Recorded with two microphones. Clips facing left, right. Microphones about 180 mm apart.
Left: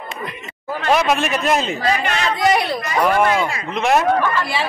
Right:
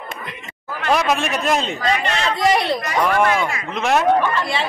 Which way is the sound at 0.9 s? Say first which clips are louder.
Left 1 dB; centre (ahead or behind).